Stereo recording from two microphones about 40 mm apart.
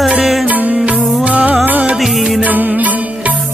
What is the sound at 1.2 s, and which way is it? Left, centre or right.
Music, right.